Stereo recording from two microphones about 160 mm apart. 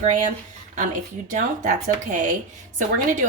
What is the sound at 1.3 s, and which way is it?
A woman's voice, 50° right (ahead or behind).